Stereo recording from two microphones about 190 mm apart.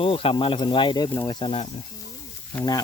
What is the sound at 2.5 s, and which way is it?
Speech, 15° left (ahead or behind).